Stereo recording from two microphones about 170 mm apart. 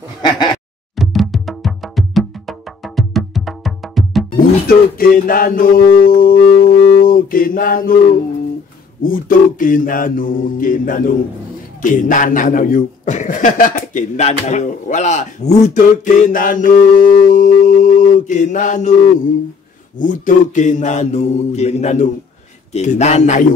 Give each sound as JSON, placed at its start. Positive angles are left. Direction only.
{"t": 0.9, "sound": "music", "side_deg": 0}
{"t": 4.6, "sound": "music", "side_deg": 60}
{"t": 9.0, "sound": "speech", "side_deg": 55}
{"t": 20.0, "sound": "a man's voice", "side_deg": 50}